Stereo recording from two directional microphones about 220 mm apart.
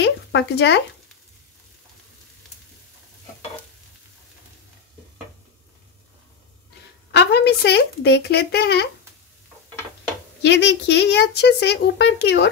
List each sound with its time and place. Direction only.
0.0 s a sound: 50° left (ahead or behind)
7.1 s speech: 50° left (ahead or behind)
10.4 s speech: 50° left (ahead or behind)